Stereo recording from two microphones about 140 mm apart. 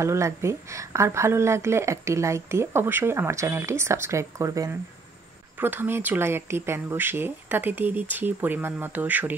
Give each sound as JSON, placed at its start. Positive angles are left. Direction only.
{"t": 0.0, "sound": "a woman's voice", "side_deg": -20}